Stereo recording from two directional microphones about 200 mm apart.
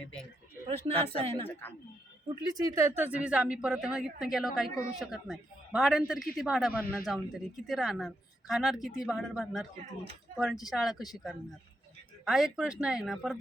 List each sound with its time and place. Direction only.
1.0 s speech: 30° right (ahead or behind); by 13.4 s centre (ahead or behind)